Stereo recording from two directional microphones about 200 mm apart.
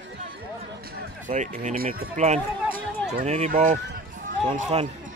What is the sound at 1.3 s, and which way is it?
Speech, 35° right (ahead or behind).